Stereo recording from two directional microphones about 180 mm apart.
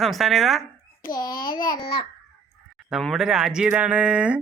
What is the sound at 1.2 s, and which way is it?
Child singing, 20° left (ahead or behind).